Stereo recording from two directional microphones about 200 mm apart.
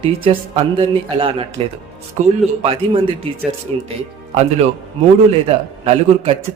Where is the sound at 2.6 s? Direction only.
30° right (ahead or behind).